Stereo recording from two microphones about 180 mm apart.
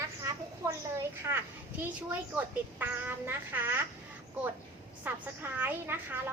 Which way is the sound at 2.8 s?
10° right (ahead or behind).